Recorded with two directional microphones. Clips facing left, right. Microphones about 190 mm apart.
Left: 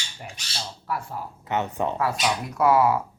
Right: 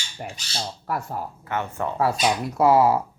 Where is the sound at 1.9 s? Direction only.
35° right (ahead or behind).